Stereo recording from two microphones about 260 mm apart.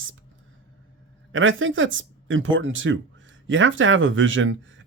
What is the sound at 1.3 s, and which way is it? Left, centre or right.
Speech, right.